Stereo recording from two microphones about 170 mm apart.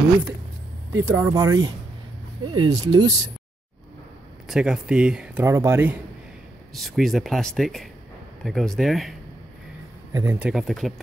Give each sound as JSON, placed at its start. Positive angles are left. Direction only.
{"t": 1.0, "sound": "speech", "side_deg": -15}
{"t": 4.5, "sound": "speech", "side_deg": -5}
{"t": 6.7, "sound": "speech", "side_deg": 0}
{"t": 10.1, "sound": "speech", "side_deg": -15}
{"t": 10.5, "sound": "speech", "side_deg": 0}